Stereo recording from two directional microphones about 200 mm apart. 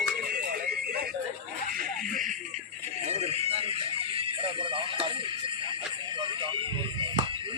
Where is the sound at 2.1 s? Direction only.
40° right (ahead or behind).